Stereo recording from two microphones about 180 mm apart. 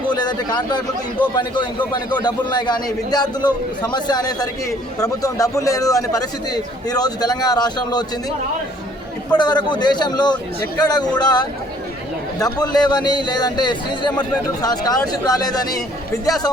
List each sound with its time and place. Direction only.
0.1 s a man's voice: 25° left (ahead or behind)
9.3 s a man's voice: 25° left (ahead or behind)